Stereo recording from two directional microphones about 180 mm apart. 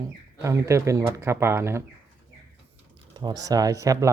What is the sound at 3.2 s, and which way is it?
Speech, 20° right (ahead or behind).